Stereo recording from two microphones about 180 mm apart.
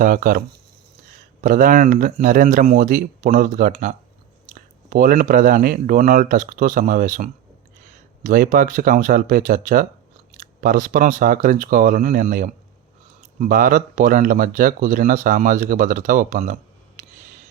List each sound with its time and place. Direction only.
0.0 s speech: 50° right (ahead or behind)